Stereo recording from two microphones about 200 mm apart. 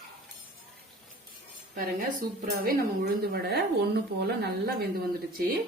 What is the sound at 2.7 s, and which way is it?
A woman's voice, 50° right (ahead or behind).